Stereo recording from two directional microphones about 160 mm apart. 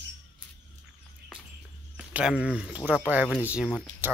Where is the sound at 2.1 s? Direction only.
5° right (ahead or behind).